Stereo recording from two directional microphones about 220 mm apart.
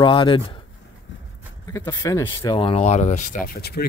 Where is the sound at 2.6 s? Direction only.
30° left (ahead or behind); by 3.9 s 45° left (ahead or behind).